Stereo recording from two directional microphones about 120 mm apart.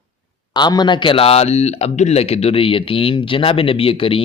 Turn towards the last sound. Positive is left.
turn(degrees=50)  # may be behind; listen again after turning